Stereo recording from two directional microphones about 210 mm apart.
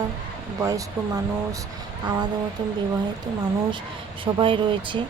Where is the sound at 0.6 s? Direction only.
15° right (ahead or behind).